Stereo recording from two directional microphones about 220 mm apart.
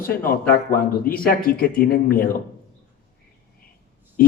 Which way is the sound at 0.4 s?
40° left (ahead or behind).